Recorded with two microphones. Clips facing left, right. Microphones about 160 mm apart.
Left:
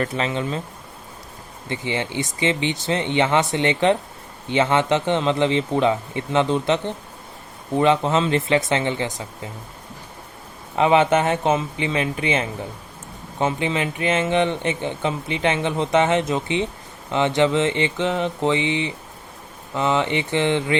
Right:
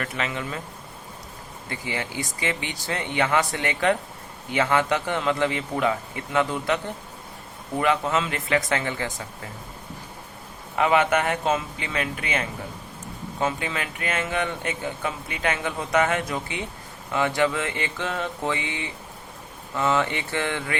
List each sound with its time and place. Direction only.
0.0 s speech: 30° left (ahead or behind)
1.7 s speech: 25° left (ahead or behind)
10.8 s speech: 25° left (ahead or behind)